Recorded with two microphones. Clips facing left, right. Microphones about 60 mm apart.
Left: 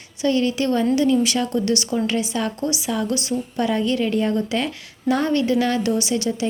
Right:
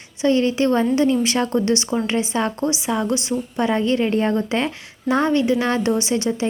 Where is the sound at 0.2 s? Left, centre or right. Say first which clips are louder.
Right 2 dB; right.